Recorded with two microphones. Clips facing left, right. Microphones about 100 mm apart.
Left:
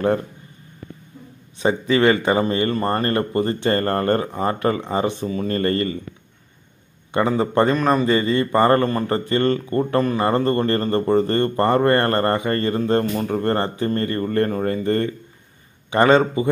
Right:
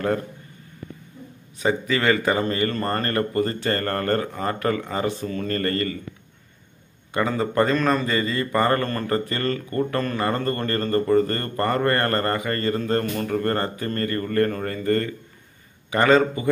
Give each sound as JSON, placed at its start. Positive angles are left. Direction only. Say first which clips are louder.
{"t": 1.6, "sound": "speech", "louder": "left 5 dB", "side_deg": 25}
{"t": 7.2, "sound": "speech", "louder": "left 3 dB", "side_deg": 25}
{"t": 8.8, "sound": "speech", "louder": "left 3 dB", "side_deg": 20}